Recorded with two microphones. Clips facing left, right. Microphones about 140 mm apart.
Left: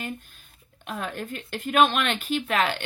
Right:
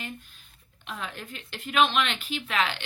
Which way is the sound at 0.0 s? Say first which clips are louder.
Left 5 dB; 50° left (ahead or behind).